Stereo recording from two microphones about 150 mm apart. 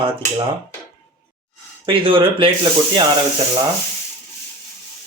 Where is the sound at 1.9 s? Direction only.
35° right (ahead or behind).